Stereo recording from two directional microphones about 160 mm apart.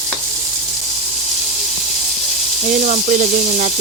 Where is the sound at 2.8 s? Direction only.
50° right (ahead or behind).